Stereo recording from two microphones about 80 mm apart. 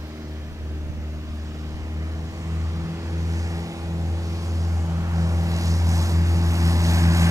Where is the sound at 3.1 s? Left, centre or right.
Right.